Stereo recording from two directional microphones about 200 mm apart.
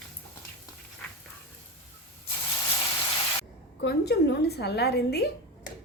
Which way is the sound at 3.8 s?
55° left (ahead or behind).